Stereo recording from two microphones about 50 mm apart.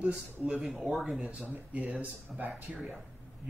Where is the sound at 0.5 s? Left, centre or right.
Centre.